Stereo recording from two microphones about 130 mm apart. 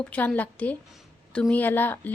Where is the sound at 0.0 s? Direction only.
10° left (ahead or behind).